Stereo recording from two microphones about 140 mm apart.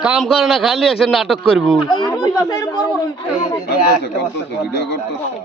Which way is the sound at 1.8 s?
30° left (ahead or behind).